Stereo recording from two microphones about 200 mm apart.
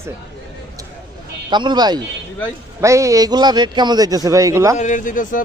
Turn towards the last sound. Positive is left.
turn(degrees=40)  # may be behind; listen again after turning